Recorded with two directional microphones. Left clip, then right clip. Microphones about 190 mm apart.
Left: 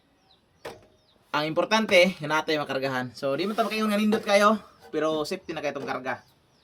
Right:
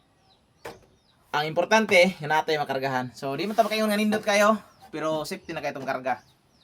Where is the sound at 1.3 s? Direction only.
25° right (ahead or behind).